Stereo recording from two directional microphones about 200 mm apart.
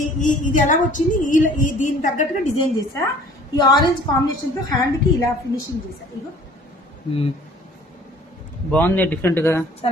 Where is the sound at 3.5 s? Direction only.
20° left (ahead or behind).